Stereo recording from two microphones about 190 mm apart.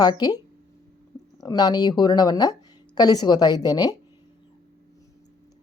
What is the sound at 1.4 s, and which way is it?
Speech, 20° left (ahead or behind).